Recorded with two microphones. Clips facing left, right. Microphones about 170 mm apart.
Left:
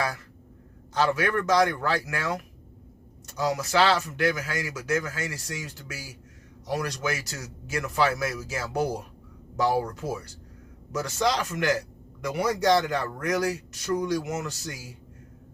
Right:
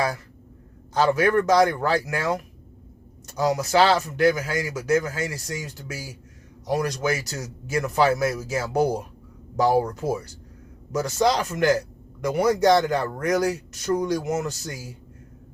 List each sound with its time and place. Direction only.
0.9 s a man's voice: 40° right (ahead or behind)